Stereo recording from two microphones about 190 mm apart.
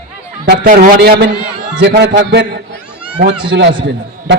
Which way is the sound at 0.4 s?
55° right (ahead or behind).